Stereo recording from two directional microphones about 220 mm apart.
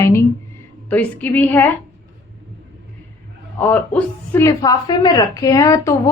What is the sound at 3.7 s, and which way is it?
A woman's voice, 10° left (ahead or behind).